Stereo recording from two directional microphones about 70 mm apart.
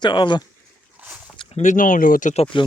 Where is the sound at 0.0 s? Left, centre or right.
Left.